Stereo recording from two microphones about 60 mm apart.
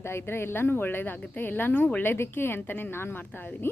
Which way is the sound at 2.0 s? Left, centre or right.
Left.